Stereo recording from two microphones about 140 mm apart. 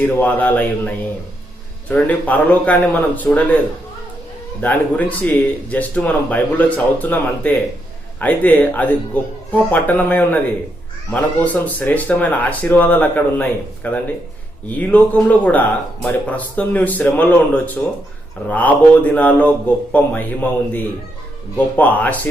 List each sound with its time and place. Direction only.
0.0 s speech: 10° left (ahead or behind)
4.6 s speech: 10° left (ahead or behind)